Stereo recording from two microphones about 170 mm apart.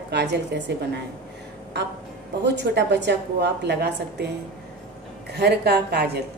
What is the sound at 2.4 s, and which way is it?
A woman's voice, 90° right.